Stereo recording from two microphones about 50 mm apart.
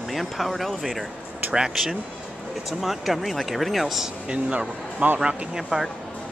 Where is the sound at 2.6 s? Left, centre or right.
Centre.